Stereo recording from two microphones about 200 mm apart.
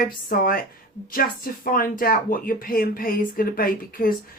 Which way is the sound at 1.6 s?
45° left (ahead or behind).